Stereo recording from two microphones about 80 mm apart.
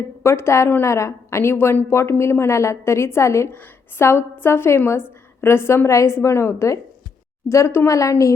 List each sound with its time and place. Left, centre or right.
0.2 s a woman's voice: left